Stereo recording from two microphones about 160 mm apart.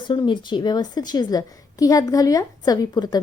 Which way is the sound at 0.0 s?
30° left (ahead or behind).